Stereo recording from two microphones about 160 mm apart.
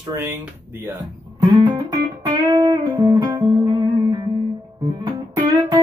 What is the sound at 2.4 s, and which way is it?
Music, 25° right (ahead or behind).